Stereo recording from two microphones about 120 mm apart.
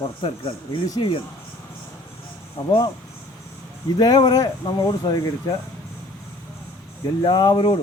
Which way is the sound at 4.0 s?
35° left (ahead or behind).